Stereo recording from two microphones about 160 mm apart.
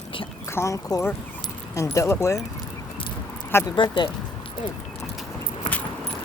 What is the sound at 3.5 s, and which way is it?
Speech, 15° left (ahead or behind).